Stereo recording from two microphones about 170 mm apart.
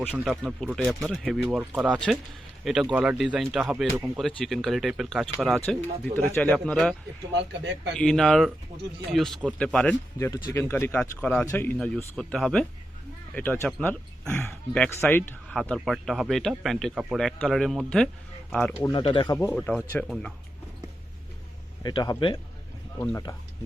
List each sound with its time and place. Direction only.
0.1 s speech: centre (ahead or behind)
3.9 s speech: 15° right (ahead or behind)
4.2 s speech: centre (ahead or behind)
6.1 s speech: 10° left (ahead or behind)
7.3 s speech: 90° right
7.9 s speech: 5° left (ahead or behind)
10.2 s speech: 15° left (ahead or behind)
18.9 s speech: 30° left (ahead or behind)
19.5 s speech: 5° left (ahead or behind)
21.8 s speech: 25° left (ahead or behind)